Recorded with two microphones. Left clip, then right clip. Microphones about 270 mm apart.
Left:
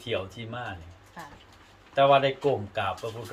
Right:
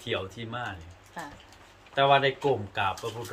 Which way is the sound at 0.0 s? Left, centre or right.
Centre.